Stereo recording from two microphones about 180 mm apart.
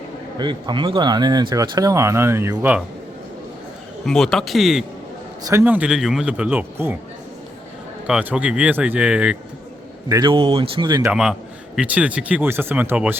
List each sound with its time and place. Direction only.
0.3 s speech: 25° right (ahead or behind)
4.0 s a man's voice: centre (ahead or behind)
5.4 s speech: 15° right (ahead or behind)
8.0 s speech: 5° right (ahead or behind)
10.1 s speech: 25° right (ahead or behind)
11.1 s a man's voice: 5° right (ahead or behind)